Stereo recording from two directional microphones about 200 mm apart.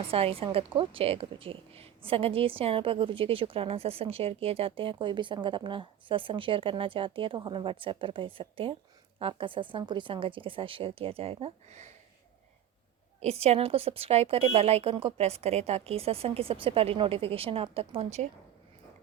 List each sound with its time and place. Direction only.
0.0 s a woman's voice: 30° right (ahead or behind)
13.1 s a woman's voice: 30° right (ahead or behind)